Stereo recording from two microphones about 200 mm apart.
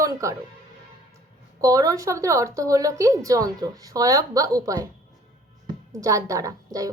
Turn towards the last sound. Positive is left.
turn(degrees=-15)  # may be behind; listen again after turning